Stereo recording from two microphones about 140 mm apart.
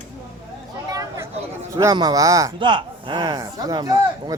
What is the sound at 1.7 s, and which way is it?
Speech, 25° right (ahead or behind).